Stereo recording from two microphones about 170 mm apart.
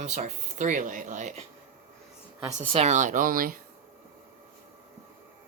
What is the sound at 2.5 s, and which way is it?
Speech, 40° right (ahead or behind).